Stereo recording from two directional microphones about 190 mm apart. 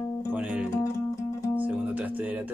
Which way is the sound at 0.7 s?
15° left (ahead or behind).